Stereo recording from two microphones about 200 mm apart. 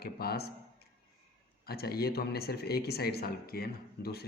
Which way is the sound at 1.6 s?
50° left (ahead or behind).